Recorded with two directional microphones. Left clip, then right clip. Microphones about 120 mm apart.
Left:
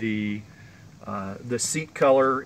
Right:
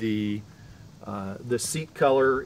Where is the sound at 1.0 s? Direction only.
75° right (ahead or behind).